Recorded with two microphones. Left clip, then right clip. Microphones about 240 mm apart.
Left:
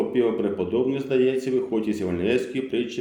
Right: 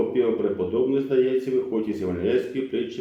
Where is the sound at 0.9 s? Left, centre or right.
Left.